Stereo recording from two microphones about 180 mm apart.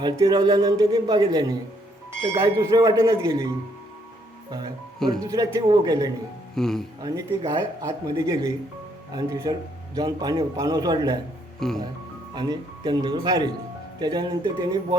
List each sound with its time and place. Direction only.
0.0 s a man's voice: 25° right (ahead or behind)
5.2 s a man's voice: 20° right (ahead or behind)
6.6 s speech: centre (ahead or behind)
7.0 s a man's voice: 20° right (ahead or behind)
11.6 s speech: centre (ahead or behind)
12.3 s a man's voice: 25° right (ahead or behind)